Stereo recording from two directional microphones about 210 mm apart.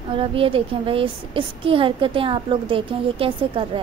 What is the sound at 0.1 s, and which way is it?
A woman's voice, 25° right (ahead or behind).